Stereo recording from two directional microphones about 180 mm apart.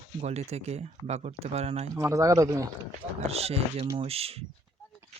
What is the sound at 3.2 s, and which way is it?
Speech, 35° right (ahead or behind).